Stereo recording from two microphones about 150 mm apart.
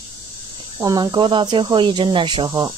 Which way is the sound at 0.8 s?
30° right (ahead or behind).